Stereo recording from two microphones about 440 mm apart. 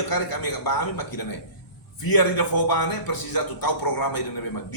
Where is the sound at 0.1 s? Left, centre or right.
Left.